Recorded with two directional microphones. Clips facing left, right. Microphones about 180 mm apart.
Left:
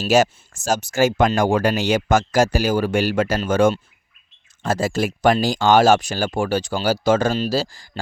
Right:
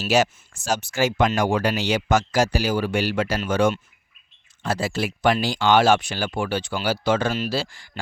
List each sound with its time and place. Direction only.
0.0 s speech: 45° left (ahead or behind)